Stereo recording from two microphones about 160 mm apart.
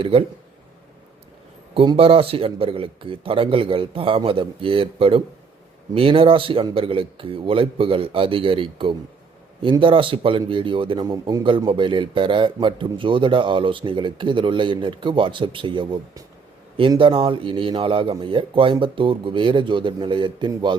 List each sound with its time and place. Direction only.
0.0 s speech: 35° right (ahead or behind)
1.7 s a man's voice: 30° right (ahead or behind)